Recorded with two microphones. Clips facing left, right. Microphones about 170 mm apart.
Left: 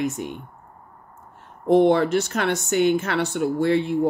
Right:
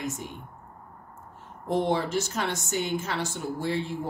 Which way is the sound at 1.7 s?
65° left (ahead or behind).